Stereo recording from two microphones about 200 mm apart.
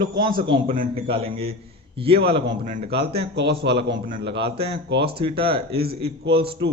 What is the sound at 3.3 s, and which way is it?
Speech, 55° right (ahead or behind).